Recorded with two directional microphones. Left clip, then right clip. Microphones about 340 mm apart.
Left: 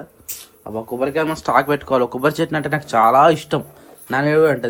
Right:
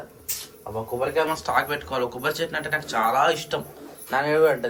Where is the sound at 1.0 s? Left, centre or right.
Left.